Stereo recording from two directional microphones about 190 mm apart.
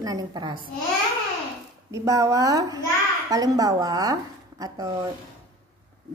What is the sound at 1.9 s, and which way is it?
A woman's voice, 15° right (ahead or behind).